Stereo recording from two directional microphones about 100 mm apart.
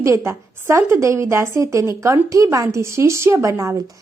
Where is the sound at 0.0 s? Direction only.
30° right (ahead or behind).